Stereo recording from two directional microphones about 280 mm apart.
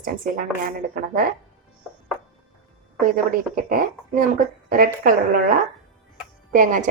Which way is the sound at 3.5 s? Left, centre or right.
Right.